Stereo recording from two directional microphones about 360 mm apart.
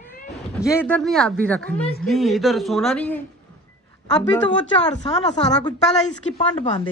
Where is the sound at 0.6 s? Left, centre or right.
Centre.